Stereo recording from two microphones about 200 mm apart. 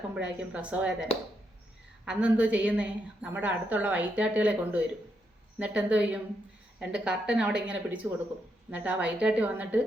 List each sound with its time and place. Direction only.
0.1 s a woman's voice: 5° right (ahead or behind)
2.0 s a woman's voice: 5° right (ahead or behind)